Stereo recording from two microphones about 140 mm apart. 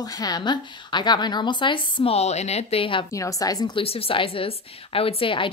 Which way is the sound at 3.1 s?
25° left (ahead or behind).